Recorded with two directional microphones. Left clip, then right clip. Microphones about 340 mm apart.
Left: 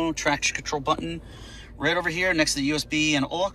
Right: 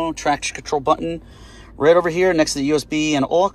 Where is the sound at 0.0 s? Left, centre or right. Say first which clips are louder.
Right 4 dB; centre.